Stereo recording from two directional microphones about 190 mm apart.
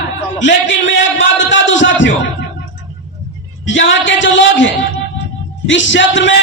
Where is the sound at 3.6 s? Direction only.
75° left (ahead or behind).